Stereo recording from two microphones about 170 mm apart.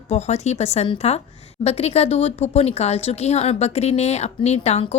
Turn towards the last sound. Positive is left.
turn(degrees=40)  # may be behind; listen again after turning